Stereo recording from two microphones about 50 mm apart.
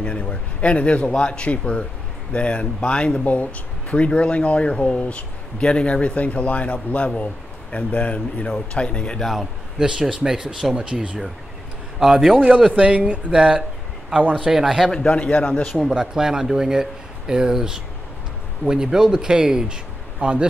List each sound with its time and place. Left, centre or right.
0.0 s speech: left
9.2 s speech: centre
12.4 s speech: right; by 14.9 s centre
14.9 s a man's voice: centre
15.1 s speech: left
15.9 s speech: centre